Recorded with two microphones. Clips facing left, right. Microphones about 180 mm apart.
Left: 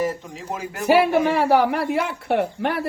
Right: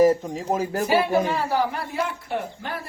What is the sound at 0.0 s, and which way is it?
Speech, 40° right (ahead or behind).